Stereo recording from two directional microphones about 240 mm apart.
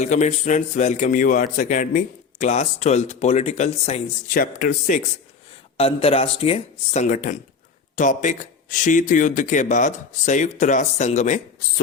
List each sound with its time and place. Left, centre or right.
0.0 s speech: left